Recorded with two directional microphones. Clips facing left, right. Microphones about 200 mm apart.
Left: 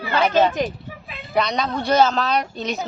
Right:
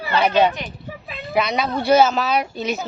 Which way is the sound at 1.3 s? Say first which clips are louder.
Right 1 dB; 5° right (ahead or behind).